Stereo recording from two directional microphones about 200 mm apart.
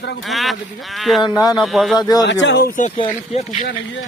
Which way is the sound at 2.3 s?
60° left (ahead or behind).